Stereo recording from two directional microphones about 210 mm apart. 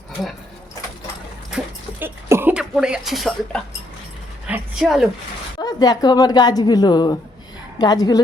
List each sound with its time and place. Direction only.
1.5 s a woman's voice: 10° right (ahead or behind)
5.5 s a woman's voice: 20° left (ahead or behind)